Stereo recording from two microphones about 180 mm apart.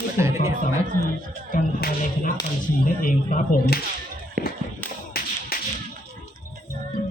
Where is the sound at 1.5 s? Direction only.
45° left (ahead or behind).